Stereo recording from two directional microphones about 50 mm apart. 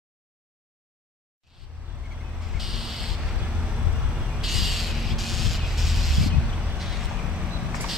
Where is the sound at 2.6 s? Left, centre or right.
Centre.